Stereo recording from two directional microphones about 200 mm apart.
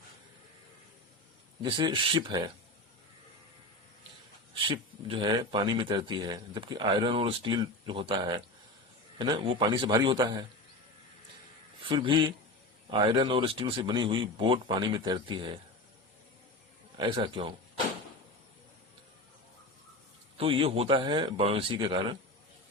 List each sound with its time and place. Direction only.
1.6 s speech: 20° right (ahead or behind)
4.5 s speech: 25° right (ahead or behind)
11.8 s speech: 25° right (ahead or behind)
17.0 s speech: 20° right (ahead or behind)
20.4 s speech: 30° right (ahead or behind)